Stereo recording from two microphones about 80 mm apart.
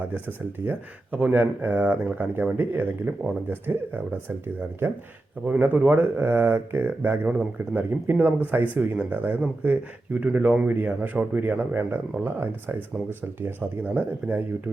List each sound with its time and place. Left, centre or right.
0.6 s speech: right
5.5 s speech: right